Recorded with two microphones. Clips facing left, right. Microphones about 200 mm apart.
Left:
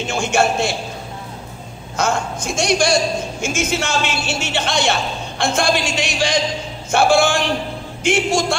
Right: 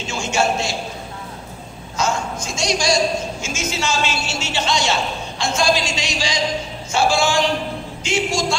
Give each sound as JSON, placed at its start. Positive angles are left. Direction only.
{"t": 0.0, "sound": "a man's voice", "side_deg": 55}
{"t": 2.0, "sound": "a man's voice", "side_deg": 55}